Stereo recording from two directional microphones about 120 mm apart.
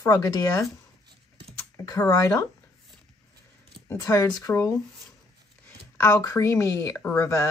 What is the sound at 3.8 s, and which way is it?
Speech, 25° left (ahead or behind).